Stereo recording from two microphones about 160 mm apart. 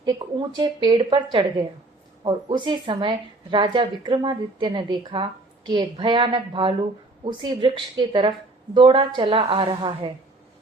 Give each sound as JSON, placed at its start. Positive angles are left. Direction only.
{"t": 0.0, "sound": "a woman's voice", "side_deg": -30}